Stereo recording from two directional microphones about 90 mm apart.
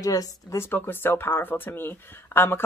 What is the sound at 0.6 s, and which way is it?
Speech, 20° left (ahead or behind).